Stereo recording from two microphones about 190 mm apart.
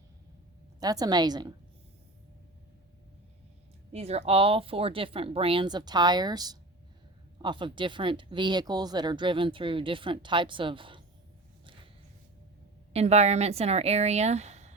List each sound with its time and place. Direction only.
0.8 s speech: 20° right (ahead or behind)
3.9 s speech: 35° right (ahead or behind)
12.9 s speech: 35° right (ahead or behind)